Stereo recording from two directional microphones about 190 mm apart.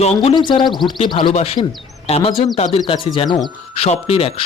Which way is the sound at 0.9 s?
25° left (ahead or behind).